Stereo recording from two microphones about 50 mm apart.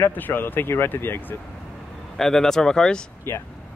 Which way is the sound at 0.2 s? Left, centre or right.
Left.